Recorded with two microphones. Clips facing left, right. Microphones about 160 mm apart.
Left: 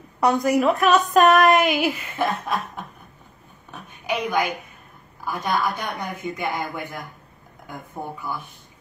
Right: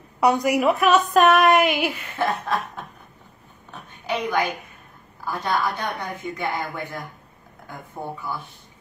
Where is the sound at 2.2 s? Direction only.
15° left (ahead or behind).